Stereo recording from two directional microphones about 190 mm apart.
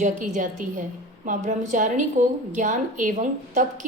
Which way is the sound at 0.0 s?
40° right (ahead or behind).